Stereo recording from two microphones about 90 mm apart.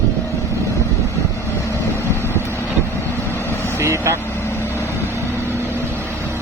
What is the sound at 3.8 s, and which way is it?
Vehicle, 30° right (ahead or behind).